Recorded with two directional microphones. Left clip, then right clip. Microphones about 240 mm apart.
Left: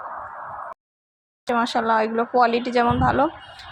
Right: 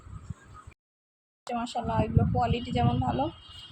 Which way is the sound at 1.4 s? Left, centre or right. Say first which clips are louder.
Left 11 dB; centre.